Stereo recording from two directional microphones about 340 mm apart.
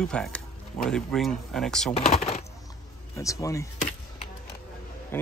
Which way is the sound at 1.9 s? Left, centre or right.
Centre.